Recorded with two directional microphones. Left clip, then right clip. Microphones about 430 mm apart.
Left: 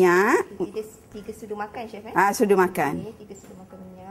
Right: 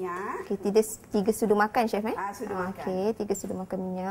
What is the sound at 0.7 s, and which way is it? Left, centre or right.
A woman's voice, right.